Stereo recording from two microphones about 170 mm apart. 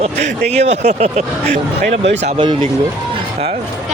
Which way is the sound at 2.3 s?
30° right (ahead or behind).